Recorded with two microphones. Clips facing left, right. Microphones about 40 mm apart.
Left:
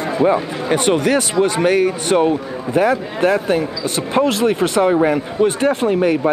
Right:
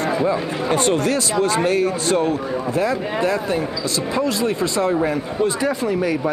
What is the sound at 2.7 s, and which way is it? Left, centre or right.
Speech, left.